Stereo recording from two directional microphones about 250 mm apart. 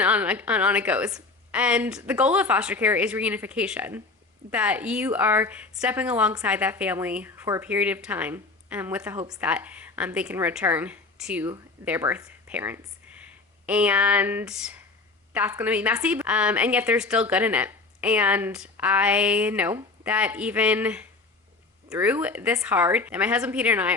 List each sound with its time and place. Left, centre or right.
0.0 s a woman's voice: centre